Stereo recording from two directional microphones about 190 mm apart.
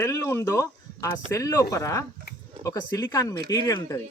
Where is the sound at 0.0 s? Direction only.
15° left (ahead or behind).